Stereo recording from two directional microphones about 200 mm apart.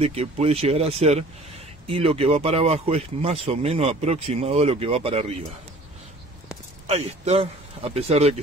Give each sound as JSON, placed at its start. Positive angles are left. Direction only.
{"t": 0.0, "sound": "speech", "side_deg": -30}
{"t": 6.9, "sound": "speech", "side_deg": -30}